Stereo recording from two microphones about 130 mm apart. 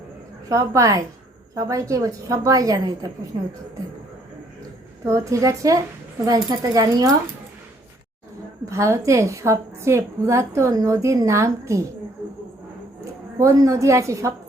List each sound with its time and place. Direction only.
0.4 s a woman's voice: 25° right (ahead or behind)
5.0 s a woman's voice: 25° right (ahead or behind)
8.7 s a woman's voice: 20° right (ahead or behind)
13.4 s a woman's voice: 25° right (ahead or behind)